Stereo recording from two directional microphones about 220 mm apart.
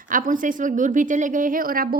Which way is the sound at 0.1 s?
40° right (ahead or behind).